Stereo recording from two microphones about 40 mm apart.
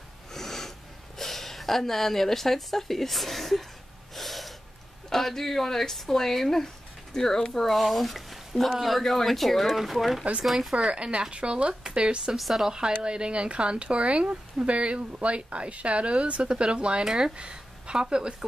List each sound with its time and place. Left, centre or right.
0.3 s sniff: centre
4.1 s snort: centre
5.1 s speech: centre
7.7 s speech: centre
10.9 s speech: right
12.4 s speech: centre
12.7 s speech: centre